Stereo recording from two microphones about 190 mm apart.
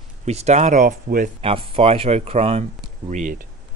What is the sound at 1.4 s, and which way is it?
Speech, 30° right (ahead or behind).